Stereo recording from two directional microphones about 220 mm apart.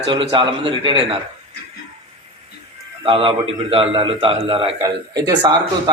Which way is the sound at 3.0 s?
25° right (ahead or behind).